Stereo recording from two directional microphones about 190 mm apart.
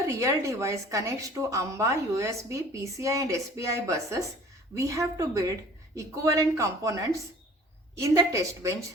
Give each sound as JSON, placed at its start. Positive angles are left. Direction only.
{"t": 0.1, "sound": "speech", "side_deg": -15}